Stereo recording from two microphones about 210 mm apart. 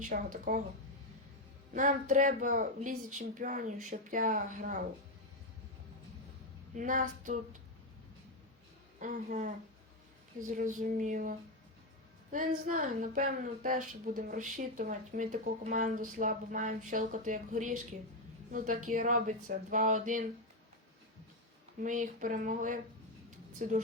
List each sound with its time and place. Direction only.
0.0 s a woman's voice: 40° right (ahead or behind)
1.7 s a woman's voice: 40° right (ahead or behind)
6.7 s a woman's voice: 40° right (ahead or behind)
9.0 s a woman's voice: 40° right (ahead or behind)
21.8 s a woman's voice: 40° right (ahead or behind)